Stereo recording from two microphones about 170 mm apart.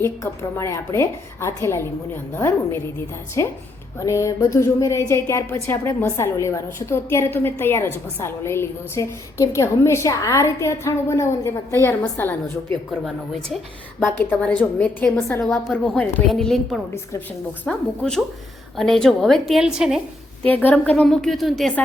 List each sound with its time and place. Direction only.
0.0 s a woman's voice: 15° left (ahead or behind)
14.2 s a woman's voice: 10° left (ahead or behind)
16.9 s a woman's voice: 15° left (ahead or behind)
17.7 s a woman's voice: 5° left (ahead or behind)
20.5 s a woman's voice: 10° left (ahead or behind)